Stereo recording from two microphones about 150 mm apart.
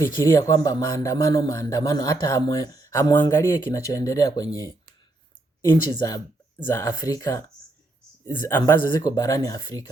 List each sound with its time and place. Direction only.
0.0 s a man's voice: 20° left (ahead or behind)